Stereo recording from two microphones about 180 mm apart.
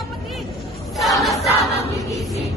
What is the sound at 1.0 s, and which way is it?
Crowd, centre (ahead or behind).